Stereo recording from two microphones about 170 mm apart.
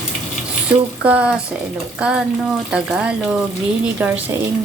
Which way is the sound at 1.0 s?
5° right (ahead or behind).